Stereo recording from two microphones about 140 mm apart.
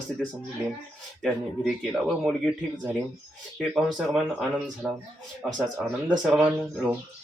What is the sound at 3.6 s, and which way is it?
Speech, centre (ahead or behind).